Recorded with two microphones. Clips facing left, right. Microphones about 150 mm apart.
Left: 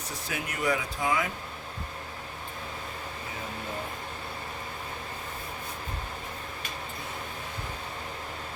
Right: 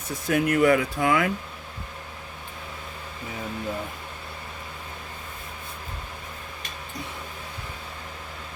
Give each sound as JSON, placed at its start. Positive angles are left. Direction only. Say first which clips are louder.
{"t": 0.3, "sound": "speech", "louder": "right 11 dB", "side_deg": -55}